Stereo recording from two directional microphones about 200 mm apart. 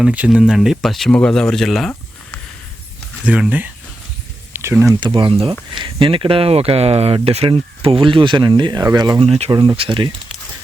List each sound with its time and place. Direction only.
0.0 s speech: 5° right (ahead or behind)
3.2 s speech: 5° right (ahead or behind); by 10.1 s 25° right (ahead or behind)